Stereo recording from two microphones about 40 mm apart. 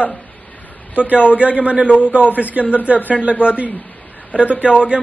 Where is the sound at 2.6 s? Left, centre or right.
Left.